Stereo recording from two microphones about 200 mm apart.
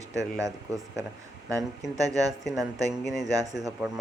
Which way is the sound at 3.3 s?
15° right (ahead or behind).